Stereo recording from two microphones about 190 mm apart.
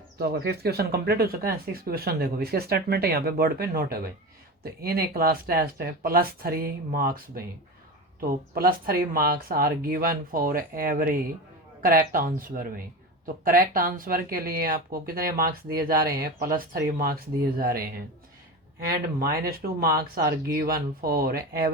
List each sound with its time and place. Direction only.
0.2 s speech: 55° right (ahead or behind)